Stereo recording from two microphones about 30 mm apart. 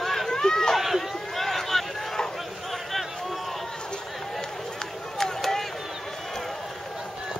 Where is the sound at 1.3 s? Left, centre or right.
Centre.